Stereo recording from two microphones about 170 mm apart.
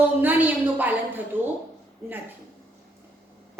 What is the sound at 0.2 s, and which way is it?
A woman's voice, 10° right (ahead or behind).